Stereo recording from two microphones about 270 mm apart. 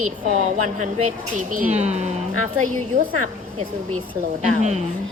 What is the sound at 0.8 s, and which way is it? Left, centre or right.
Speech, right.